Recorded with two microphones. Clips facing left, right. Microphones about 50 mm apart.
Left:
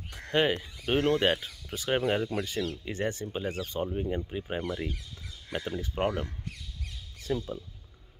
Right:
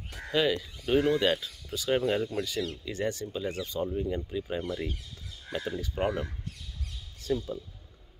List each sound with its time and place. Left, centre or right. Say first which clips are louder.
0.3 s speech: left 1 dB; left
0.9 s speech: right 1 dB; left
1.2 s speech: even; left
7.2 s a sound: right 1 dB; left